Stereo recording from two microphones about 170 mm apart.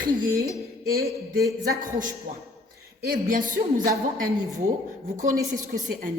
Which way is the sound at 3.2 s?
55° right (ahead or behind).